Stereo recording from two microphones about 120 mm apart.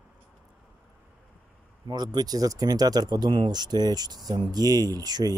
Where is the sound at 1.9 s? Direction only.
35° right (ahead or behind).